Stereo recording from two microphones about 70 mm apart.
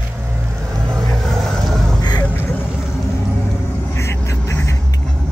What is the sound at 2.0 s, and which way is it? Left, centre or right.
Vehicle, left.